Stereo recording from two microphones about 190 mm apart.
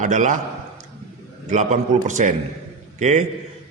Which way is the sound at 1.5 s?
40° right (ahead or behind).